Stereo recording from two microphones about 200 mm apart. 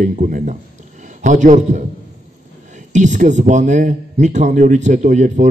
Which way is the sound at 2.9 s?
35° right (ahead or behind).